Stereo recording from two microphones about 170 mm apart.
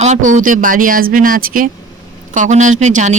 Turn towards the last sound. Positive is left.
turn(degrees=-45)  # may be behind; listen again after turning